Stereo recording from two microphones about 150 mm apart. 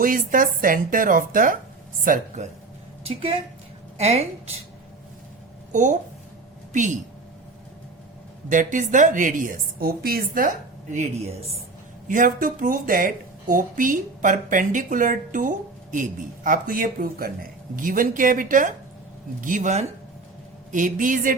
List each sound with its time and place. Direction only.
0.0 s speech: 65° right (ahead or behind)
3.1 s speech: 40° right (ahead or behind)
5.7 s speech: 55° right (ahead or behind)
8.4 s speech: 60° right (ahead or behind); by 10.5 s 75° right (ahead or behind)
10.9 s speech: 45° right (ahead or behind)
12.0 s speech: 65° right (ahead or behind)
17.7 s speech: 65° right (ahead or behind)